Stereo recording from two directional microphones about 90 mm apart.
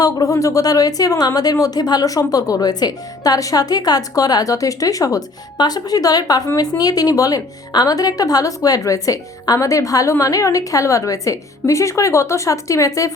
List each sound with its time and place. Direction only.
0.0 s a woman's voice: 40° left (ahead or behind)